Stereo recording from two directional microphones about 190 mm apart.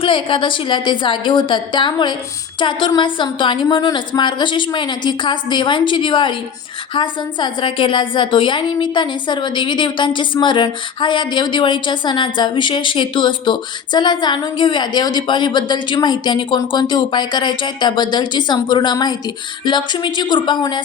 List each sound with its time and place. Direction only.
0.0 s a woman's voice: 25° left (ahead or behind)